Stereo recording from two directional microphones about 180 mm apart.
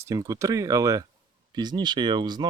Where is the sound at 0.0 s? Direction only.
20° right (ahead or behind).